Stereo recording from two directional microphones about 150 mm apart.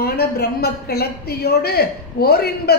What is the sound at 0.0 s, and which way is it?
Speech, 90° left.